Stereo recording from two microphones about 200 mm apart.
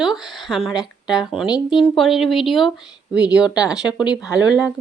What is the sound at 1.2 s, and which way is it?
A woman's voice, centre (ahead or behind).